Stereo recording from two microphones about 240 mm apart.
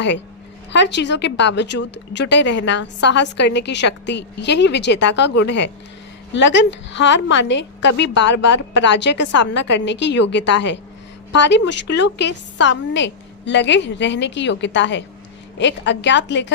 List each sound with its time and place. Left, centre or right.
0.7 s speech: left